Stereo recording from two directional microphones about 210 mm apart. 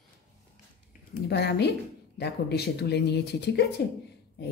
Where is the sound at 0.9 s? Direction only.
50° left (ahead or behind).